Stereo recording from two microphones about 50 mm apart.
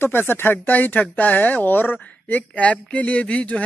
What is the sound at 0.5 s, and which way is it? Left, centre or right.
Speech, left.